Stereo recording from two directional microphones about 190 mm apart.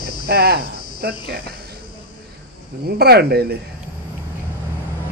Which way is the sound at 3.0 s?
55° right (ahead or behind).